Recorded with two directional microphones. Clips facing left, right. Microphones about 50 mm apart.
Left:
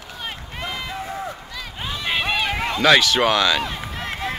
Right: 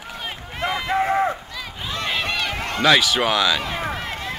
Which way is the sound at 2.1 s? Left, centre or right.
Centre.